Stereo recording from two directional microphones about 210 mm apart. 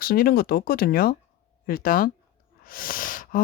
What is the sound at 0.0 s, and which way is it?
Speech, 45° left (ahead or behind).